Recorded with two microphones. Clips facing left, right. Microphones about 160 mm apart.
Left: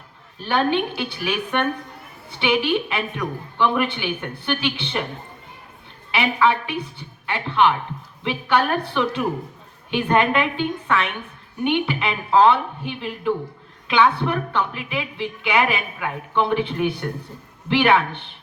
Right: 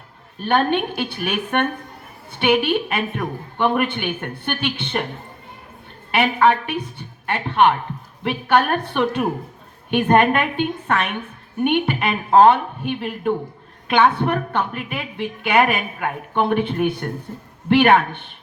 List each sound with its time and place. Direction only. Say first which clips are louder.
0.4 s a woman's voice: right 2 dB; 55° right (ahead or behind)
6.1 s a woman's voice: right 3 dB; 50° right (ahead or behind)